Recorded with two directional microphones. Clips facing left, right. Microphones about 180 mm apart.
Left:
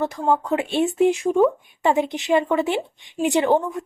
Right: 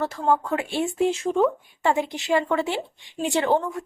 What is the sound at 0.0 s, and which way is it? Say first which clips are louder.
A woman's voice: left 2 dB; 15° left (ahead or behind).